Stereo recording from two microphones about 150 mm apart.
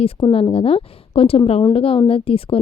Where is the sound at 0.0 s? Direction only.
35° left (ahead or behind).